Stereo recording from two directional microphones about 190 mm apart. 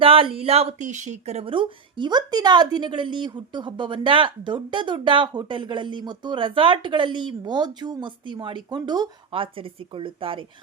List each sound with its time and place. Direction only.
0.0 s a woman's voice: 30° right (ahead or behind)